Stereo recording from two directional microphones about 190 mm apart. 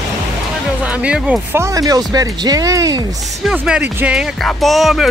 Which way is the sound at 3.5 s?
5° right (ahead or behind).